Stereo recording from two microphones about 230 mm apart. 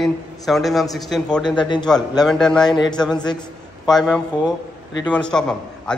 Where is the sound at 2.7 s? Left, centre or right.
Centre.